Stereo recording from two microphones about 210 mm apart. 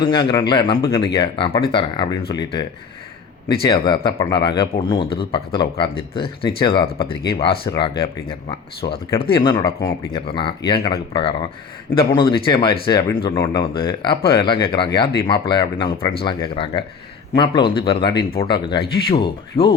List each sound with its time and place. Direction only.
0.0 s speech: 20° left (ahead or behind)